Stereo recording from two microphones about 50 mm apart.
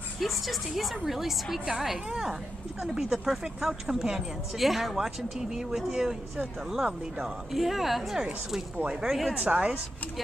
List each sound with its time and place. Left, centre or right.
0.2 s a woman's voice: centre
9.4 s speech: right